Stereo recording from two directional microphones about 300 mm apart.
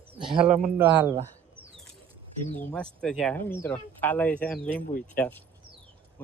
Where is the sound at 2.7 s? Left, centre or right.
Centre.